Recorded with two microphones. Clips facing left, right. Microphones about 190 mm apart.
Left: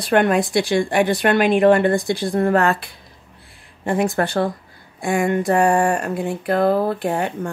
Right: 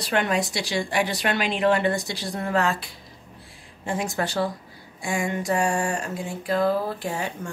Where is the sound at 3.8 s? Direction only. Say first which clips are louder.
Left 7 dB; 60° left (ahead or behind).